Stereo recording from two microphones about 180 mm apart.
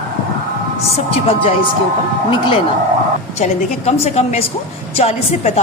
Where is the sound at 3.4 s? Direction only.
40° left (ahead or behind).